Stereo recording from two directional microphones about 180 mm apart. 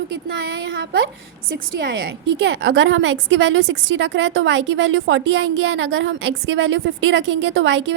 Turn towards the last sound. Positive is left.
turn(degrees=-85)